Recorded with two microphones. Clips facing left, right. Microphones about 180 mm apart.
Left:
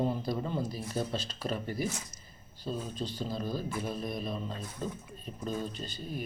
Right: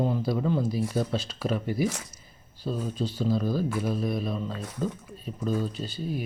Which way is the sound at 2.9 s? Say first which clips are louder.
Right 6 dB; 10° right (ahead or behind).